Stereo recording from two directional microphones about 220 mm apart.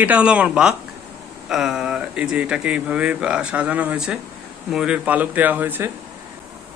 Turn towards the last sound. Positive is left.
turn(degrees=-10)  # may be behind; listen again after turning